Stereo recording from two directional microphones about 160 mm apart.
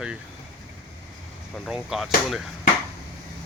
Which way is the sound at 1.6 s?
Centre (ahead or behind).